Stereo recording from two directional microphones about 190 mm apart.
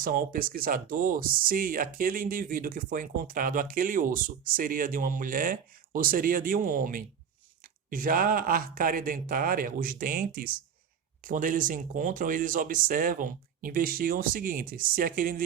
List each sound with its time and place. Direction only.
0.0 s speech: 50° right (ahead or behind)